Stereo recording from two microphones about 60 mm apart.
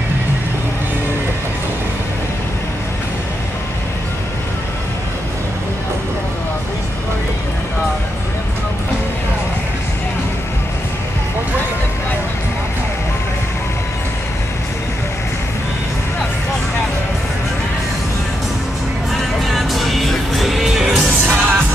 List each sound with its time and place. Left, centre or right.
19.4 s music: centre
21.3 s music: right